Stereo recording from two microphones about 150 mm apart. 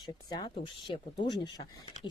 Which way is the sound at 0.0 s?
30° left (ahead or behind).